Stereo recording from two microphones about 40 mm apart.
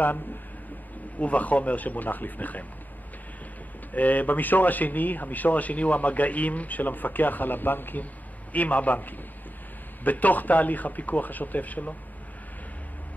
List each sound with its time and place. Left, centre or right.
1.2 s speech: left
3.9 s a man's voice: left
8.5 s a man's voice: left